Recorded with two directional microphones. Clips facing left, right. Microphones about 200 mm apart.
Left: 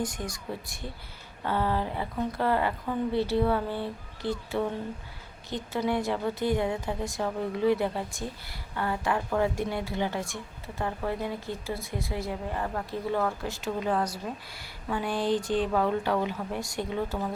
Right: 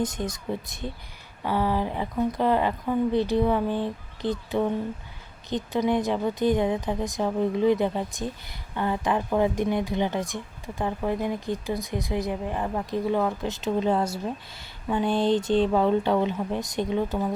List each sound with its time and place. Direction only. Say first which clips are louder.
0.0 s a woman's voice: right 5 dB; 20° right (ahead or behind)